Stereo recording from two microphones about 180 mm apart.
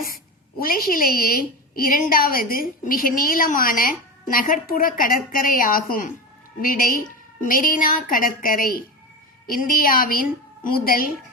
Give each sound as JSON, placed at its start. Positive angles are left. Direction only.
{"t": 0.6, "sound": "a woman's voice", "side_deg": 55}